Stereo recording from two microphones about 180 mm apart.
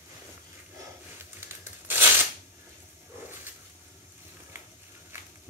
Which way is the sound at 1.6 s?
10° right (ahead or behind).